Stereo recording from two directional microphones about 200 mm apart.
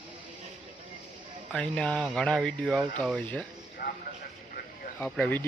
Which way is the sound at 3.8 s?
45° left (ahead or behind).